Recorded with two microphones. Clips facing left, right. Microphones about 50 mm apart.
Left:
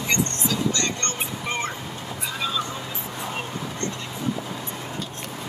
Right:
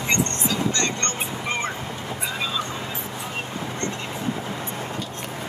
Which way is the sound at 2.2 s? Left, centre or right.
Right.